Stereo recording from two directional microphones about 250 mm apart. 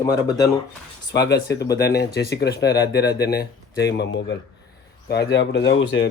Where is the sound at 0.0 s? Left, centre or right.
Centre.